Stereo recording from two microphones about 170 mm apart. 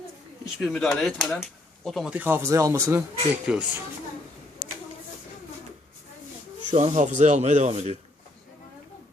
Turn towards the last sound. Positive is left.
turn(degrees=-40)  # may be behind; listen again after turning